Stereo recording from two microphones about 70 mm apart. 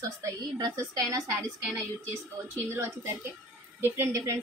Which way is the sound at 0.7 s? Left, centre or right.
Right.